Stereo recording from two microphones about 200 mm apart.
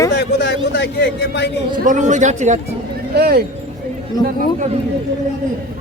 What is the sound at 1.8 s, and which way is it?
Speech, 40° right (ahead or behind).